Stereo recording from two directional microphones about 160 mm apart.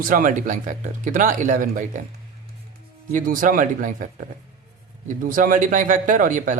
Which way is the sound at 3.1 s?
55° right (ahead or behind).